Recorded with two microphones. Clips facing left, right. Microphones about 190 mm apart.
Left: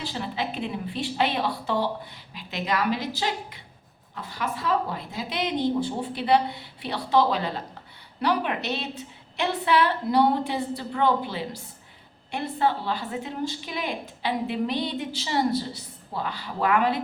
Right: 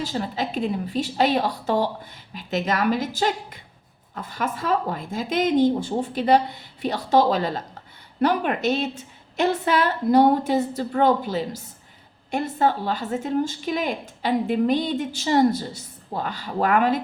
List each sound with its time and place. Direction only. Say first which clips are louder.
0.0 s a woman's voice: right 4 dB; 45° right (ahead or behind)